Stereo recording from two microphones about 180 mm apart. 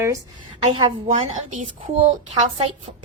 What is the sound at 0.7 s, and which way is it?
Speech, 25° right (ahead or behind).